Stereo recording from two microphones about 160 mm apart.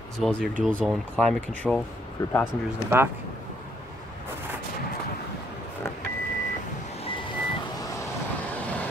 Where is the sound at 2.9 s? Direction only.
15° right (ahead or behind).